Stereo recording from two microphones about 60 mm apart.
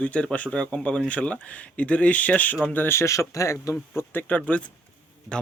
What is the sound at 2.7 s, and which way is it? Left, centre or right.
Speech, left.